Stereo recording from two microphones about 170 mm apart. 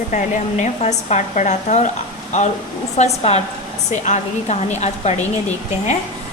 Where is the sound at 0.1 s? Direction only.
45° left (ahead or behind).